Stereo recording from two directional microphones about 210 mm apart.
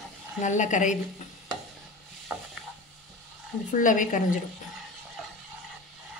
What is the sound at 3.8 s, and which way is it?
Speech, 40° left (ahead or behind).